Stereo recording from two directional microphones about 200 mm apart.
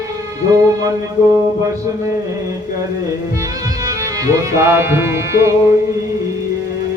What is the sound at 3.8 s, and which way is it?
Music, 15° right (ahead or behind).